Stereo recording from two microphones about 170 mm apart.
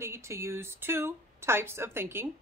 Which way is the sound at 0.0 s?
15° right (ahead or behind).